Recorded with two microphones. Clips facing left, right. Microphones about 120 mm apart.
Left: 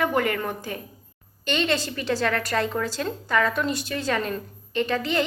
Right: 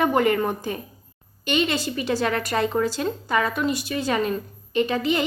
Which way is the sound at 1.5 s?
10° right (ahead or behind).